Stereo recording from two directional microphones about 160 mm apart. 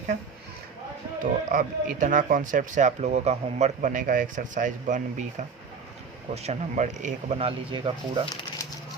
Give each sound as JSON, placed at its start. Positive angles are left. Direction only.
{"t": 1.2, "sound": "speech", "side_deg": -60}